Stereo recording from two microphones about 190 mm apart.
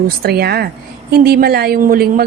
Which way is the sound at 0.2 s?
55° right (ahead or behind).